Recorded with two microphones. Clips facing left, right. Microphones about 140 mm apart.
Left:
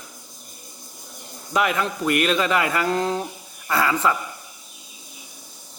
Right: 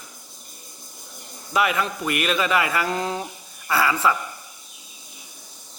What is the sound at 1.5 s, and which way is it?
Speech, 10° right (ahead or behind).